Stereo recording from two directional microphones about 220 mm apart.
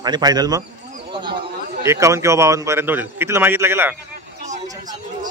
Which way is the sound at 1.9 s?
15° right (ahead or behind).